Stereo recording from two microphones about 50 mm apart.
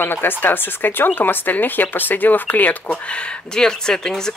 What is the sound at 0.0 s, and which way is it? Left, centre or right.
Speech, left.